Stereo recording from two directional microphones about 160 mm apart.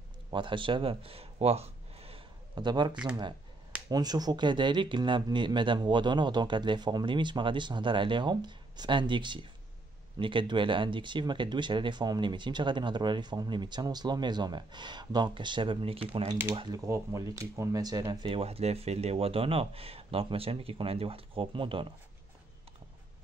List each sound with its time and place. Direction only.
0.3 s speech: 30° right (ahead or behind)
16.5 s speech: 25° right (ahead or behind)